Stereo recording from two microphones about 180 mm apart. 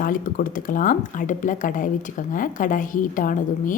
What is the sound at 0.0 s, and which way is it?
Speech, 50° left (ahead or behind).